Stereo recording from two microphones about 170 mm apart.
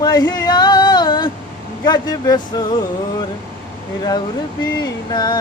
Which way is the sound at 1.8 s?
25° left (ahead or behind).